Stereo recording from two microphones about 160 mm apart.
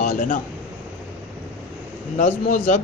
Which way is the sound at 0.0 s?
55° left (ahead or behind).